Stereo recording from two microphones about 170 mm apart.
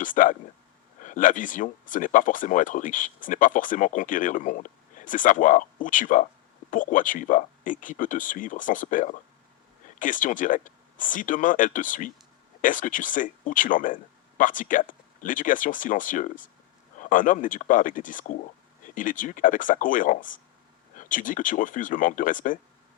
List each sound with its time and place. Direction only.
0.0 s speech: 50° left (ahead or behind)